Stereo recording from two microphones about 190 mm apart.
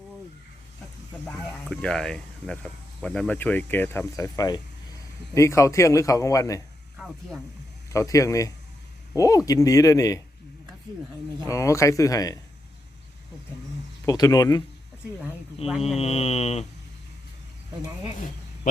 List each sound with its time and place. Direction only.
1.3 s speech: 5° left (ahead or behind)
7.0 s snake: 5° right (ahead or behind)
7.9 s speech: 15° left (ahead or behind)
11.4 s speech: 15° left (ahead or behind)
14.0 s speech: 20° left (ahead or behind)
15.6 s speech: 30° left (ahead or behind)